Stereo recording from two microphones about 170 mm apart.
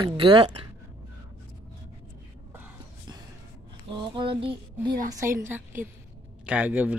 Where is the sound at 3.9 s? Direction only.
30° right (ahead or behind).